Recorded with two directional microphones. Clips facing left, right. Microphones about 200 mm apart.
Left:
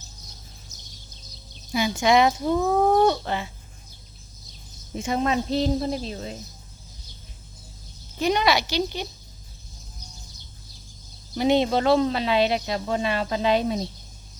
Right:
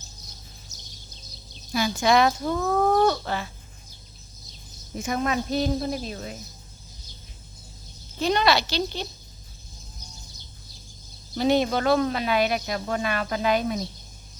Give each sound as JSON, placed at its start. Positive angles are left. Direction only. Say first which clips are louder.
{"t": 1.7, "sound": "speech", "louder": "left 1 dB", "side_deg": 20}
{"t": 4.9, "sound": "speech", "louder": "left 2 dB", "side_deg": 30}
{"t": 8.2, "sound": "speech", "louder": "even", "side_deg": 15}
{"t": 11.3, "sound": "speech", "louder": "left 1 dB", "side_deg": 20}